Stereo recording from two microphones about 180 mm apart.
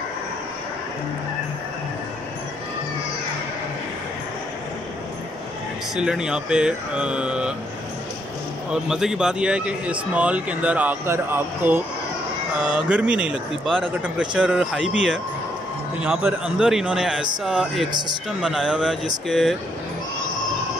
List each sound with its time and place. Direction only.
5.9 s a man's voice: 5° right (ahead or behind)
8.8 s a man's voice: 5° right (ahead or behind)